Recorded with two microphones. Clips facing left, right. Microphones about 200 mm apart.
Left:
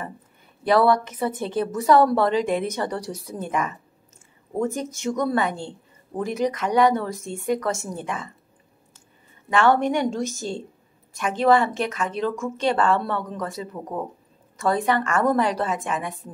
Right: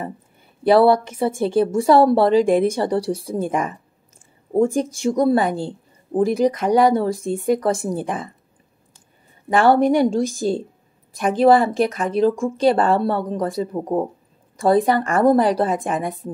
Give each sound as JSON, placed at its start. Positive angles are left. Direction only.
{"t": 0.7, "sound": "a woman's voice", "side_deg": -30}
{"t": 9.5, "sound": "speech", "side_deg": -35}